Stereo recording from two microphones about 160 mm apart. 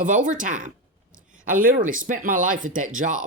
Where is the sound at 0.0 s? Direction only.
55° right (ahead or behind).